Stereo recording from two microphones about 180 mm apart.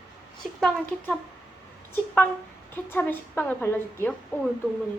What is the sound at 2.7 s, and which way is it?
A woman's voice, 10° left (ahead or behind).